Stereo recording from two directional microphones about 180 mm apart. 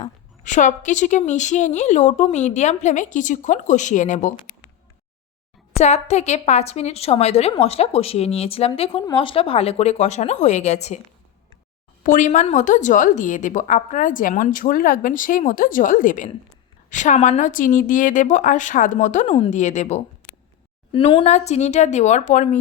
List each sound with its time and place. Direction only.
0.0 s a woman's voice: 45° left (ahead or behind)
5.8 s speech: 40° left (ahead or behind)
12.0 s a woman's voice: 45° left (ahead or behind)
20.9 s speech: 30° left (ahead or behind)